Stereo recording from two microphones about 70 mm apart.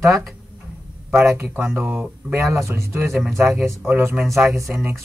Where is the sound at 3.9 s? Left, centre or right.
Right.